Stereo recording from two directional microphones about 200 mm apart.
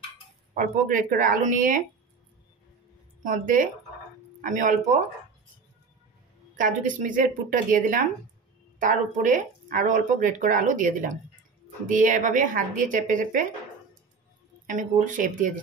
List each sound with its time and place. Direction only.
0.6 s speech: 45° right (ahead or behind)
3.3 s speech: 40° right (ahead or behind)
6.5 s speech: 40° right (ahead or behind)
14.8 s speech: 40° right (ahead or behind)